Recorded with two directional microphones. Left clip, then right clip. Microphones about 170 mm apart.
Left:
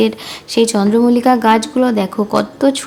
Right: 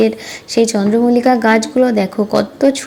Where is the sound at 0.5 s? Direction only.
Centre (ahead or behind).